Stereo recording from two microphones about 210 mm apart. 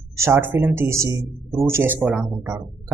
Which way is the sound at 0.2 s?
10° right (ahead or behind).